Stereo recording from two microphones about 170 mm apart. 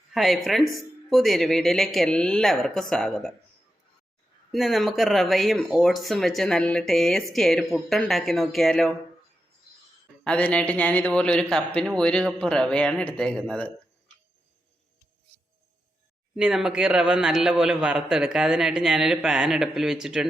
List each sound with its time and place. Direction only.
0.1 s speech: centre (ahead or behind)
4.5 s speech: centre (ahead or behind)
10.2 s speech: 5° left (ahead or behind)
16.3 s speech: 5° right (ahead or behind)